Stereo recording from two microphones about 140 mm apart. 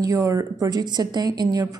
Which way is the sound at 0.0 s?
25° right (ahead or behind).